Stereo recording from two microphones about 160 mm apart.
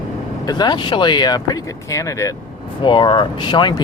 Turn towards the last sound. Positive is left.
turn(degrees=30)  # may be behind; listen again after turning